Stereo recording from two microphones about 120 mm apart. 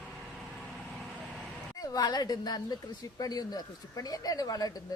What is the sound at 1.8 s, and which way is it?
Speech, 35° left (ahead or behind).